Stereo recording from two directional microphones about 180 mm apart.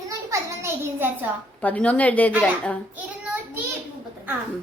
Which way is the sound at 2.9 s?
10° right (ahead or behind).